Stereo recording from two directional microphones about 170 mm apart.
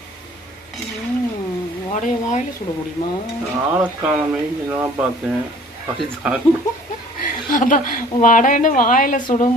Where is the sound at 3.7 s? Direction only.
10° right (ahead or behind).